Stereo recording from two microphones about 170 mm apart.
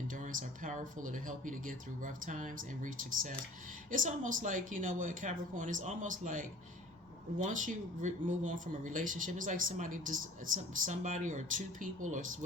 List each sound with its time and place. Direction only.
0.1 s speech: 50° right (ahead or behind)